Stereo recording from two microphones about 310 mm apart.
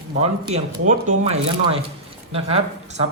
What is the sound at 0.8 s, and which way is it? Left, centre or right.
Speech, right.